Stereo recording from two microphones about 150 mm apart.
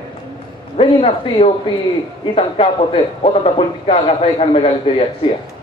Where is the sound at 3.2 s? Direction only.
40° left (ahead or behind).